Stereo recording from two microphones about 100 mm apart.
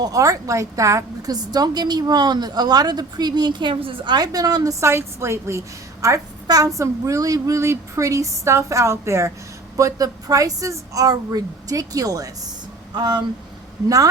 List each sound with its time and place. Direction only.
0.0 s a woman's voice: 35° right (ahead or behind)
4.8 s a woman's voice: 25° right (ahead or behind); by 13.2 s 45° right (ahead or behind)
13.8 s a woman's voice: 35° right (ahead or behind)